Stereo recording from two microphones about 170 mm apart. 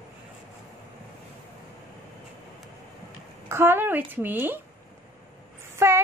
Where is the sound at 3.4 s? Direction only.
15° right (ahead or behind).